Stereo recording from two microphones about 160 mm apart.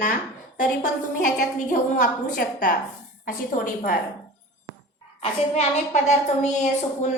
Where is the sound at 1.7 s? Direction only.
55° left (ahead or behind).